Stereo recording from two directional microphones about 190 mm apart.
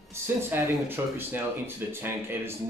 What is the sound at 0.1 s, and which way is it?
Speech, 10° right (ahead or behind).